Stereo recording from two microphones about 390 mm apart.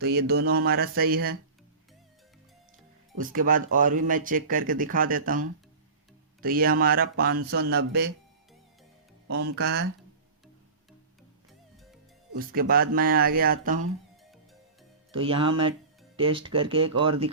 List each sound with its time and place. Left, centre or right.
0.0 s speech: right
3.2 s speech: right
9.2 s speech: right
12.3 s speech: right
15.1 s speech: centre